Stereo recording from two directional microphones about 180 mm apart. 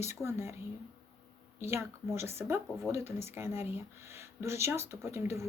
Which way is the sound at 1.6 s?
15° right (ahead or behind).